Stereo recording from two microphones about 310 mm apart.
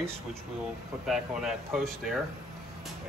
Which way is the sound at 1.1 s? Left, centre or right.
Centre.